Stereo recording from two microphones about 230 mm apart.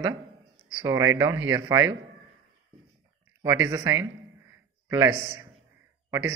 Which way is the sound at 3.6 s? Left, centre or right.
Centre.